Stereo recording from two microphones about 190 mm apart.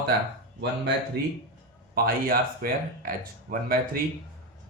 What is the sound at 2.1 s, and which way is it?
Speech, 50° right (ahead or behind).